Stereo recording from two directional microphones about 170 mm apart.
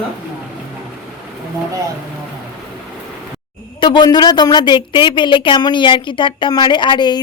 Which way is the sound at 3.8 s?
25° left (ahead or behind).